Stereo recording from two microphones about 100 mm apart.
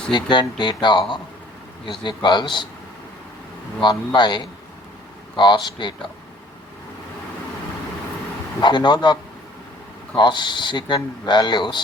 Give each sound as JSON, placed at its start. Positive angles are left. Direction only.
{"t": 0.1, "sound": "speech", "side_deg": 50}
{"t": 3.8, "sound": "speech", "side_deg": 50}
{"t": 8.6, "sound": "speech", "side_deg": 50}
{"t": 10.2, "sound": "speech", "side_deg": 50}